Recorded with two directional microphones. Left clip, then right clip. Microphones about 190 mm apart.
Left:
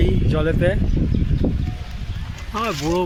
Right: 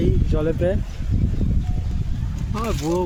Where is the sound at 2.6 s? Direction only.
Centre (ahead or behind).